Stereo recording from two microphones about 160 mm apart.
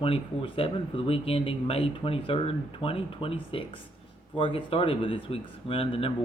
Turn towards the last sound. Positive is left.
turn(degrees=35)  # may be behind; listen again after turning